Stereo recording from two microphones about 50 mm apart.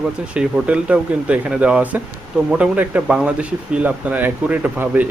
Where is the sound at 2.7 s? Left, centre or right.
Right.